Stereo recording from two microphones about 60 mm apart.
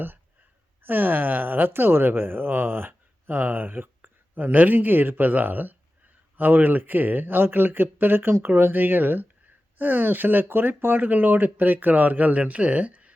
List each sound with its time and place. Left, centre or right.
0.8 s speech: right